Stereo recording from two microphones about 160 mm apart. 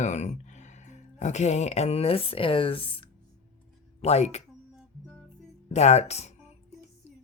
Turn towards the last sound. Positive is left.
turn(degrees=40)  # may be behind; listen again after turning